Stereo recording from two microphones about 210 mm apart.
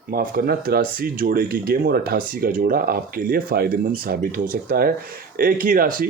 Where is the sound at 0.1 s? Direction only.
45° right (ahead or behind).